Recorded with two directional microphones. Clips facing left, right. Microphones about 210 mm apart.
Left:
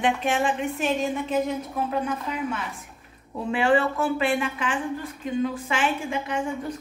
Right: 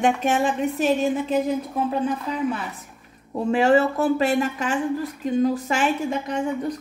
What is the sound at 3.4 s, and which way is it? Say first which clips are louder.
A woman's voice: right 4 dB; 40° right (ahead or behind).